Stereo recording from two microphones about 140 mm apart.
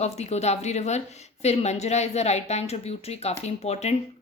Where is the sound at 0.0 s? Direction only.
50° left (ahead or behind).